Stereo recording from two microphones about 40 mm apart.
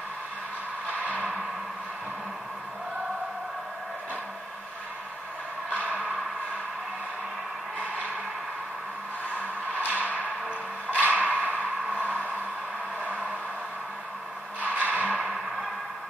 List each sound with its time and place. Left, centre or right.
9.7 s music: right
11.0 s a sound: right
14.6 s music: right